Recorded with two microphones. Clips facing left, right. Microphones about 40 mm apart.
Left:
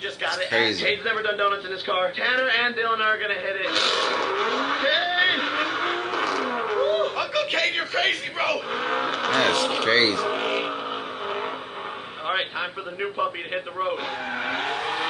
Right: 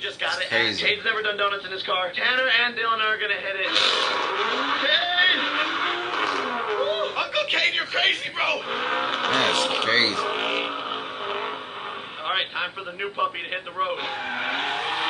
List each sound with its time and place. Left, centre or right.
1.2 s a man's voice: centre
3.6 s vehicle: right
6.5 s a sound: centre
6.8 s a man's voice: right
9.8 s speech: centre
10.2 s speech: centre
12.3 s a man's voice: centre
14.4 s vehicle: centre